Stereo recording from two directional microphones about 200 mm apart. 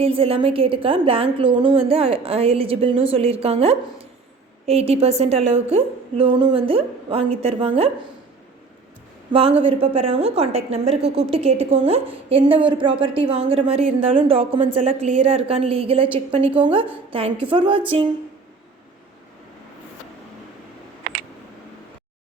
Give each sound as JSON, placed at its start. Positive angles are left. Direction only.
{"t": 0.0, "sound": "a woman's voice", "side_deg": -30}
{"t": 9.3, "sound": "a woman's voice", "side_deg": -25}
{"t": 14.7, "sound": "a woman's voice", "side_deg": -35}